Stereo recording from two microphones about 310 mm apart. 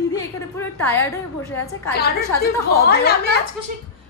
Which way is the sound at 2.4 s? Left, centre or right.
Left.